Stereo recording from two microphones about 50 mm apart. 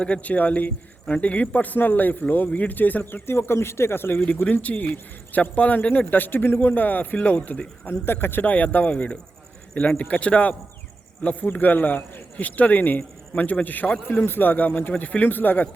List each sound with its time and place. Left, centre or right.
0.0 s a man's voice: left
3.2 s a man's voice: left
4.8 s a man's voice: left
7.9 s a man's voice: left
8.4 s a man's voice: left
14.2 s a man's voice: left